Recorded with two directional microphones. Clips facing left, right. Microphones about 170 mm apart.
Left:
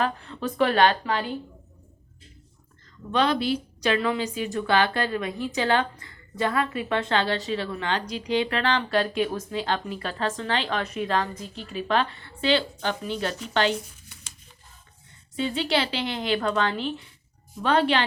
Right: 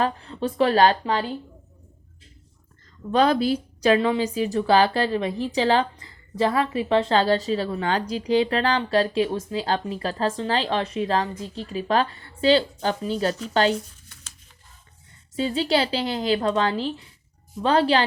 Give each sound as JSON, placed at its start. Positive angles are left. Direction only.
{"t": 0.0, "sound": "a woman's voice", "side_deg": -35}
{"t": 3.1, "sound": "a woman's voice", "side_deg": -40}
{"t": 15.4, "sound": "a woman's voice", "side_deg": -35}